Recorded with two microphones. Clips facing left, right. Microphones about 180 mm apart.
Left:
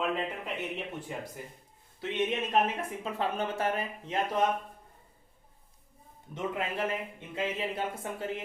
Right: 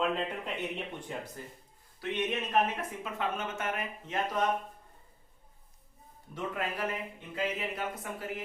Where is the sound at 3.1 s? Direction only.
35° left (ahead or behind).